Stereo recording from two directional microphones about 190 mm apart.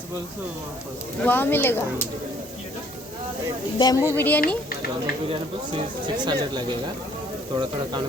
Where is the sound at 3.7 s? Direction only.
20° left (ahead or behind).